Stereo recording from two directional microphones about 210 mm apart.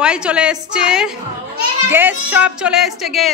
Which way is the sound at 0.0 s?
5° right (ahead or behind).